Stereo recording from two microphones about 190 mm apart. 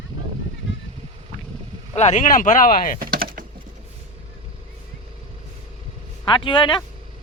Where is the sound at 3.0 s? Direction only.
50° right (ahead or behind).